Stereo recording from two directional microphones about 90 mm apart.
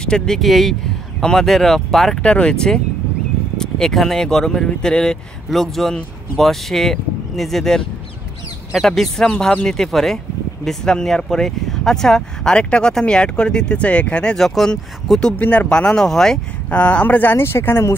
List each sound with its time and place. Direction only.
0.0 s speech: 5° left (ahead or behind)
16.7 s speech: 15° left (ahead or behind)